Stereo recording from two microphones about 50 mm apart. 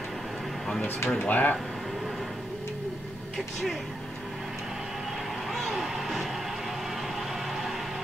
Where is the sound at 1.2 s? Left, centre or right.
Left.